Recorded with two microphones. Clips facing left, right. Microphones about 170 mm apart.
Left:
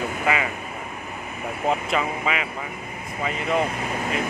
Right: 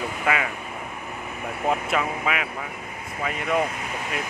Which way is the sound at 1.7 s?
5° right (ahead or behind).